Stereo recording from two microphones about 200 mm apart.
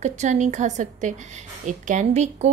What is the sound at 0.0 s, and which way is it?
A woman's voice, 35° right (ahead or behind).